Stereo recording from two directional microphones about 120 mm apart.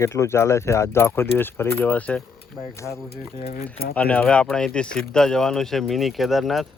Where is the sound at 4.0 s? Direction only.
10° left (ahead or behind).